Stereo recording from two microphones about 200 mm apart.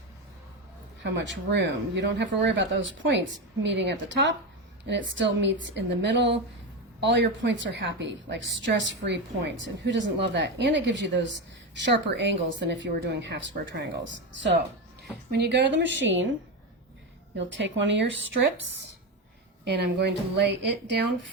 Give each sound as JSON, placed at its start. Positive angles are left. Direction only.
{"t": 1.0, "sound": "a woman's voice", "side_deg": -60}
{"t": 17.3, "sound": "a woman's voice", "side_deg": -65}
{"t": 19.6, "sound": "a woman's voice", "side_deg": -55}